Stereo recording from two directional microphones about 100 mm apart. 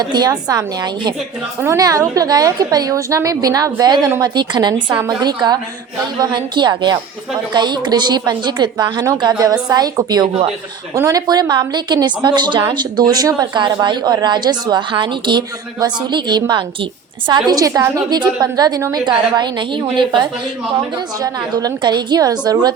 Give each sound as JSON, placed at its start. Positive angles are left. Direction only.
{"t": 0.0, "sound": "a woman's voice", "side_deg": -45}
{"t": 10.9, "sound": "speech", "side_deg": -30}
{"t": 11.3, "sound": "a woman's voice", "side_deg": -45}
{"t": 21.2, "sound": "speech", "side_deg": -40}